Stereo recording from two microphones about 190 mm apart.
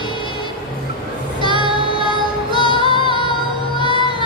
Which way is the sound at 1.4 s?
25° right (ahead or behind).